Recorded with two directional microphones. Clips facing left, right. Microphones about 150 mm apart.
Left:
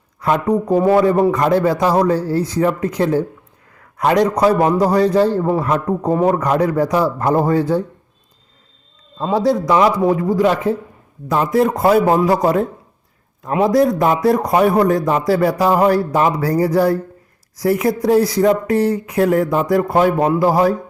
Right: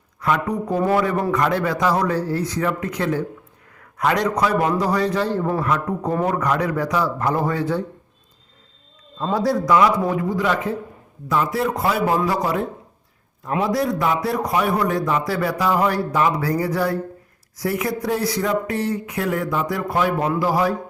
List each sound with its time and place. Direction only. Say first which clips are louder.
0.2 s a man's voice: left 5 dB; 30° left (ahead or behind)
0.8 s a man's voice: left 5 dB; 20° left (ahead or behind)
1.3 s a man's voice: left 5 dB; 35° left (ahead or behind)
6.1 s a man's voice: left 6 dB; 20° left (ahead or behind)
6.3 s a man's voice: left 5 dB; 35° left (ahead or behind)
9.3 s a man's voice: left 3 dB; 20° left (ahead or behind); by 20.7 s 45° left (ahead or behind)